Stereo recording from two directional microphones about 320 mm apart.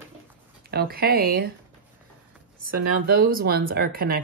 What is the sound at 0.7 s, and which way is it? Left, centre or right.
Speech, right.